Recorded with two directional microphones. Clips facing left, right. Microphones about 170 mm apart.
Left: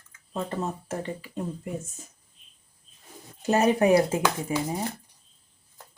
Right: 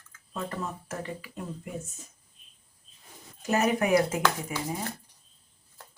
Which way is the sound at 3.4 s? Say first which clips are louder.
Left 4 dB; 30° left (ahead or behind).